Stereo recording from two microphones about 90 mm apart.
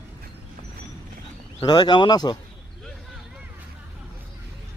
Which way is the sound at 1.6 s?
50° left (ahead or behind).